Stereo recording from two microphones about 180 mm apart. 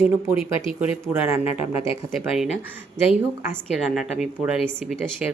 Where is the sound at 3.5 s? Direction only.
5° right (ahead or behind).